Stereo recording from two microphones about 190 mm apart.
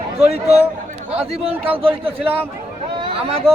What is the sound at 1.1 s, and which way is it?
A man's voice, 30° right (ahead or behind).